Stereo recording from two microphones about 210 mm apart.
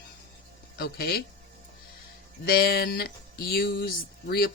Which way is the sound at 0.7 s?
50° left (ahead or behind).